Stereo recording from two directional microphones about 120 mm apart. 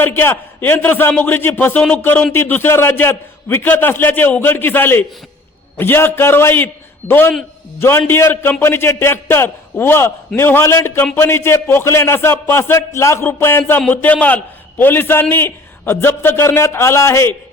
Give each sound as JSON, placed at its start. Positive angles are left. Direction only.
{"t": 0.0, "sound": "a man's voice", "side_deg": 20}